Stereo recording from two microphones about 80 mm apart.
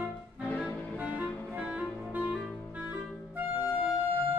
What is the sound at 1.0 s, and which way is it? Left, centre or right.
Music, centre.